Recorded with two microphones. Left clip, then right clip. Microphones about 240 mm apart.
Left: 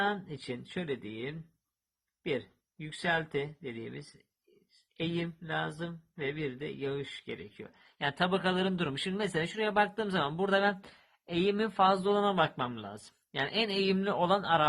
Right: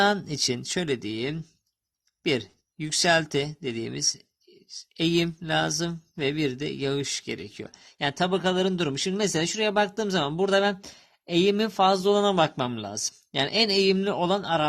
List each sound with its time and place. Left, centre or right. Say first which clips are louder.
0.0 s a man's voice: right 10 dB; right